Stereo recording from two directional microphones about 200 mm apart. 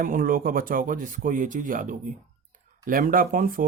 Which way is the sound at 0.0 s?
45° right (ahead or behind).